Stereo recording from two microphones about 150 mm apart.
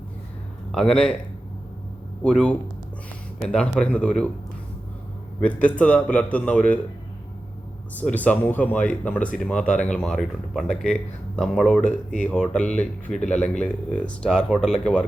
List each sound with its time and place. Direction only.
0.7 s speech: 5° left (ahead or behind)
2.2 s speech: 5° left (ahead or behind)
5.4 s speech: 10° left (ahead or behind)
7.9 s speech: 10° left (ahead or behind)
11.8 s speech: 50° left (ahead or behind)
12.3 s speech: 10° left (ahead or behind)